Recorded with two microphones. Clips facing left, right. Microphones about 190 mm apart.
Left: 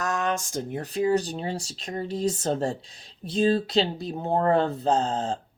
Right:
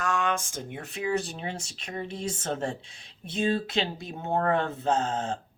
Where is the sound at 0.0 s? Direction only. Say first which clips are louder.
Left 1 dB; 40° left (ahead or behind).